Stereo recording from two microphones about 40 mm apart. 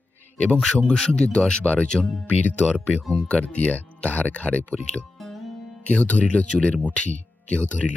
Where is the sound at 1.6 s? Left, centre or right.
Left.